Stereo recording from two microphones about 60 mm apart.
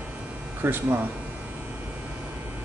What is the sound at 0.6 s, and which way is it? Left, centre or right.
Speech, right.